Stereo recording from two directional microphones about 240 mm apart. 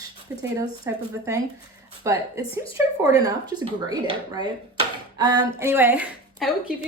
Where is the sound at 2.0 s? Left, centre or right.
Centre.